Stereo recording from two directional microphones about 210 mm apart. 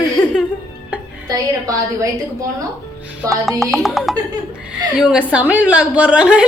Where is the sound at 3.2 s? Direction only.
15° right (ahead or behind).